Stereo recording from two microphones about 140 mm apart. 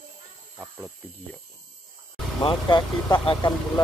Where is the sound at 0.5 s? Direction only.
15° right (ahead or behind).